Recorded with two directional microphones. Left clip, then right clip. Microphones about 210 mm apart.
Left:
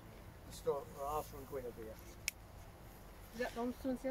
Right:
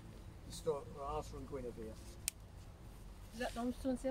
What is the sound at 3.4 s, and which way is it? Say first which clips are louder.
Speech: left 1 dB; 50° right (ahead or behind).